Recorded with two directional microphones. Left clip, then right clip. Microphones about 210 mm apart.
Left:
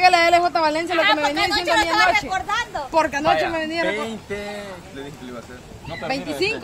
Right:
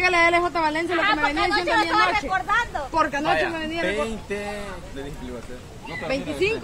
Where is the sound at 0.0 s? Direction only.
50° left (ahead or behind).